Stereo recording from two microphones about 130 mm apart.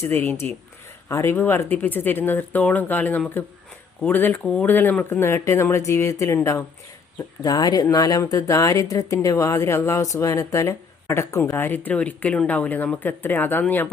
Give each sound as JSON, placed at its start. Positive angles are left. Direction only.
{"t": 0.0, "sound": "speech", "side_deg": 20}